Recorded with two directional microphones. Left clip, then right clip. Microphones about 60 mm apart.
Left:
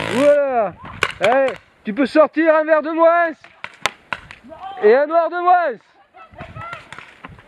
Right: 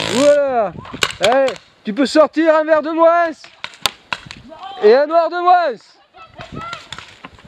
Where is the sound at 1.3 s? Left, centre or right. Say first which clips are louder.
Right 2 dB; centre.